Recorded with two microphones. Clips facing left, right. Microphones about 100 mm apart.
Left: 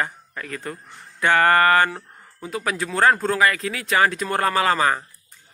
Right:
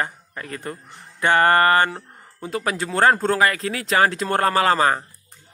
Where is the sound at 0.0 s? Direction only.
30° right (ahead or behind).